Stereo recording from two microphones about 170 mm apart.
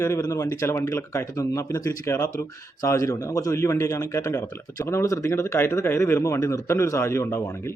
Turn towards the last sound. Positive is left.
turn(degrees=15)  # may be behind; listen again after turning